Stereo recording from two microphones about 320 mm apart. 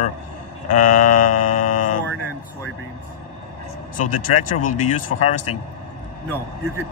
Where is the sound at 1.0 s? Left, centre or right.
Left.